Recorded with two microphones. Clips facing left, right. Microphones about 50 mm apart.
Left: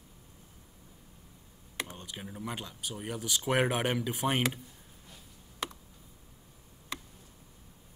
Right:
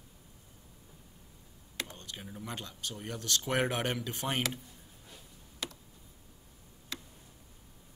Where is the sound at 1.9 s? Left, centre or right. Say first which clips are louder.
Left 2 dB; centre.